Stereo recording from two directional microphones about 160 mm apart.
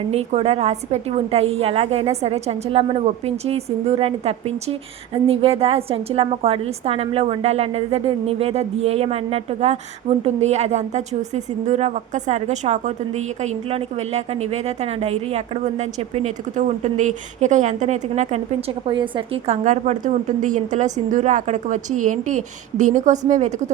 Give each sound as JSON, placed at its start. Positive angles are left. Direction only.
{"t": 0.1, "sound": "a woman's voice", "side_deg": -40}
{"t": 18.9, "sound": "a woman's voice", "side_deg": -30}